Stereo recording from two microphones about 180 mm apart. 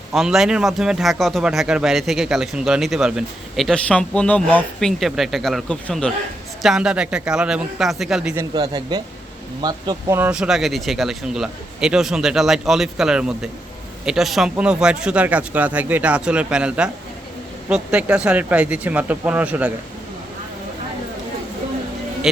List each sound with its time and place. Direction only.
0.1 s speech: centre (ahead or behind)
8.5 s speech: 25° right (ahead or behind)
10.2 s speech: 5° right (ahead or behind)